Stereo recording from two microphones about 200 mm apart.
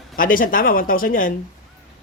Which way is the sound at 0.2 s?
45° left (ahead or behind).